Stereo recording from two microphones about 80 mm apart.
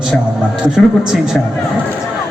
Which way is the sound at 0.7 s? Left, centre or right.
Centre.